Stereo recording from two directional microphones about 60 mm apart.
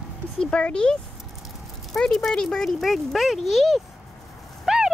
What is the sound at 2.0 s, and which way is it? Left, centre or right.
Speech, centre.